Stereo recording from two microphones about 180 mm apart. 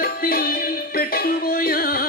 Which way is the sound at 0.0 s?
55° left (ahead or behind).